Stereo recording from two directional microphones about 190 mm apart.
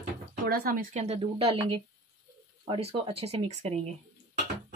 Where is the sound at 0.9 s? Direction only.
35° right (ahead or behind).